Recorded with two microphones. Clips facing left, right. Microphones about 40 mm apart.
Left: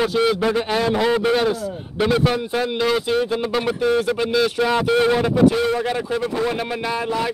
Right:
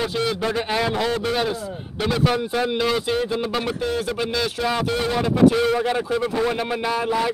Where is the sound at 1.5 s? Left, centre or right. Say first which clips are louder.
Left 3 dB; centre.